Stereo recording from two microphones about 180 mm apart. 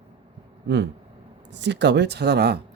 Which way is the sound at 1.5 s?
75° right (ahead or behind).